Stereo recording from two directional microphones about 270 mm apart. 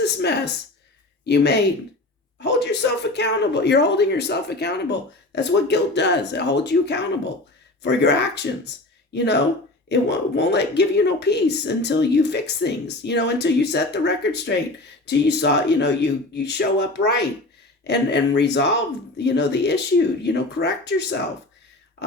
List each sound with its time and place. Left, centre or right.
0.0 s a woman's voice: left